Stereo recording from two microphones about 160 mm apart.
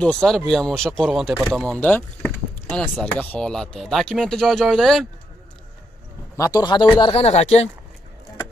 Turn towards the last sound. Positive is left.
turn(degrees=40)  # may be behind; listen again after turning